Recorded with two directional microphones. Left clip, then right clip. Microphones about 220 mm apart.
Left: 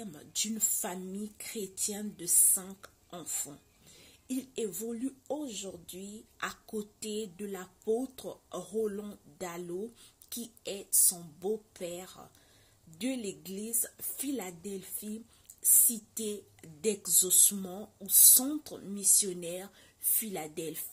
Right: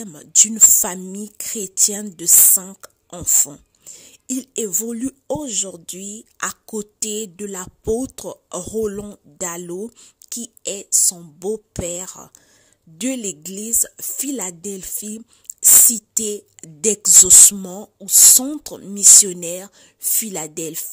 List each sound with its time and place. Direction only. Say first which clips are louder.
0.0 s speech: right 19 dB; 50° right (ahead or behind)